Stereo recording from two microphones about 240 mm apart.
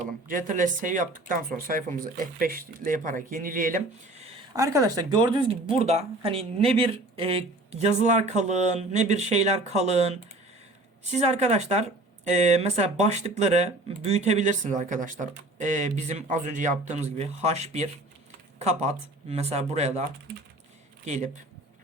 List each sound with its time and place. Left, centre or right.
0.3 s speech: right
4.5 s speech: centre
5.6 s speech: right
11.2 s speech: right